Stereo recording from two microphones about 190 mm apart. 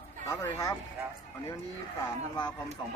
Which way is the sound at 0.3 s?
20° left (ahead or behind).